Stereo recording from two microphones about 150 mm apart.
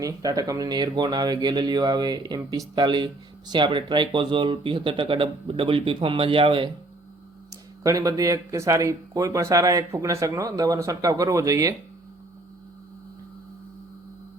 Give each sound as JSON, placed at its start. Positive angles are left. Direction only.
{"t": 0.0, "sound": "speech", "side_deg": -25}
{"t": 7.5, "sound": "speech", "side_deg": -25}